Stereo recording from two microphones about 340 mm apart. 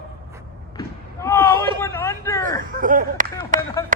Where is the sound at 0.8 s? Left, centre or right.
Centre.